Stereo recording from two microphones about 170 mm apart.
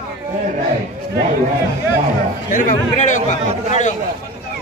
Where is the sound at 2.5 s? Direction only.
50° left (ahead or behind).